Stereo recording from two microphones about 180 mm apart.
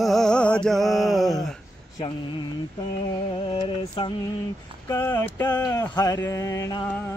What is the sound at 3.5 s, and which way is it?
Mantra, 25° left (ahead or behind).